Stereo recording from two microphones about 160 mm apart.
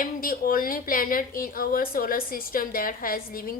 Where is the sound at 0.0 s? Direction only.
60° left (ahead or behind).